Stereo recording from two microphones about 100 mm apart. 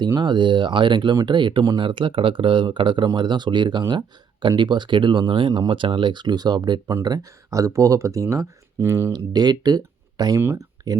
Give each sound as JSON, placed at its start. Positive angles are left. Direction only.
{"t": 0.2, "sound": "speech", "side_deg": -50}
{"t": 1.8, "sound": "speech", "side_deg": -55}
{"t": 9.1, "sound": "speech", "side_deg": -45}
{"t": 10.3, "sound": "speech", "side_deg": -25}